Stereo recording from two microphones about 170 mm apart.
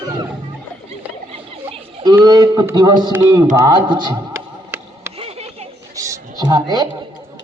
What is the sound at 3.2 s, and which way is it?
A man's voice, 20° right (ahead or behind).